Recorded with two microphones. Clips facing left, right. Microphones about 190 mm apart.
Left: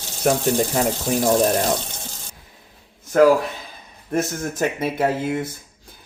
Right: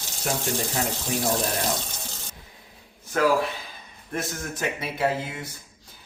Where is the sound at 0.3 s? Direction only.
50° left (ahead or behind).